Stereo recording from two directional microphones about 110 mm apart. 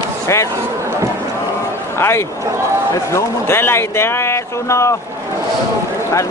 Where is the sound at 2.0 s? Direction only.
20° left (ahead or behind).